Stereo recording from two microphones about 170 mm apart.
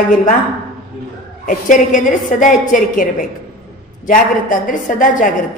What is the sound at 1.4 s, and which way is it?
A woman's voice, 50° left (ahead or behind).